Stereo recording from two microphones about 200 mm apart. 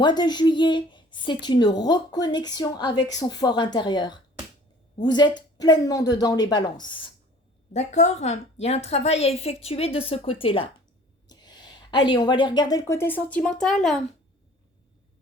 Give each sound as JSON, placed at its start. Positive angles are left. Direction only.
{"t": 0.0, "sound": "a woman's voice", "side_deg": 20}
{"t": 7.7, "sound": "a woman's voice", "side_deg": 35}